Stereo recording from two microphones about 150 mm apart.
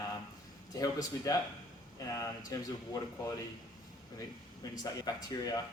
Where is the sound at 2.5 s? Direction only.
25° left (ahead or behind).